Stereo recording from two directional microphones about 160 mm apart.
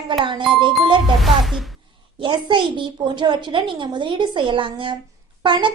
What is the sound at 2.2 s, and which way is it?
A woman's voice, 30° right (ahead or behind).